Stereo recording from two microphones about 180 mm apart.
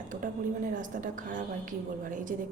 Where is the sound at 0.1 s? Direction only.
50° right (ahead or behind).